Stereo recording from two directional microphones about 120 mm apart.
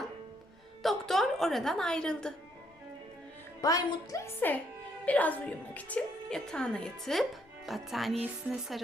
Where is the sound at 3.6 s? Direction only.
30° left (ahead or behind); by 8.2 s centre (ahead or behind).